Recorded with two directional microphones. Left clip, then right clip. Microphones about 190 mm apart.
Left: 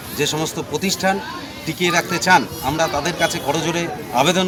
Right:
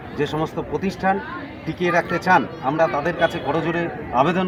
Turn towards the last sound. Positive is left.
turn(degrees=30)  # may be behind; listen again after turning